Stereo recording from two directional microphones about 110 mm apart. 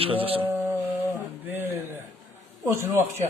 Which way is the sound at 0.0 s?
55° right (ahead or behind).